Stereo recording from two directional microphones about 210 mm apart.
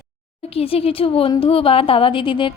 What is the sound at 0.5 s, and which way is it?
A woman's voice, 25° left (ahead or behind).